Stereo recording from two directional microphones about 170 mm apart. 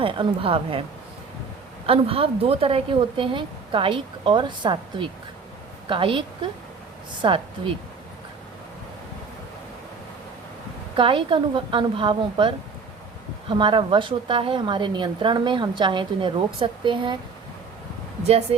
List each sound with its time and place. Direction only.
0.0 s a woman's voice: 30° right (ahead or behind)
1.9 s a woman's voice: 35° right (ahead or behind)
10.9 s a woman's voice: 30° right (ahead or behind)
18.2 s a woman's voice: 35° right (ahead or behind)